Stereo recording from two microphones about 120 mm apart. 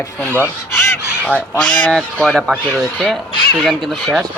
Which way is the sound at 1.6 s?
10° left (ahead or behind).